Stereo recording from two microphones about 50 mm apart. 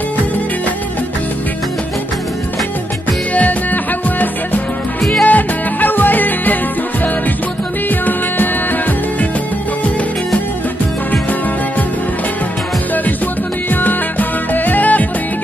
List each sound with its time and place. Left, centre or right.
3.3 s music: left
13.7 s music: left